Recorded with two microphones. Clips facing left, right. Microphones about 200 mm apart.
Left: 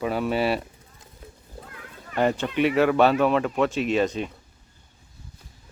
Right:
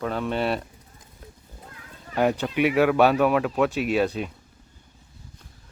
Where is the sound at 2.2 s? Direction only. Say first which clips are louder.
Even; 5° right (ahead or behind).